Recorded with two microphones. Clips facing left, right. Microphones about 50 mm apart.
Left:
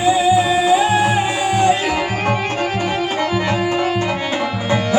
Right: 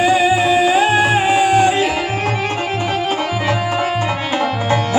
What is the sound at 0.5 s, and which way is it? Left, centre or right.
Music, right.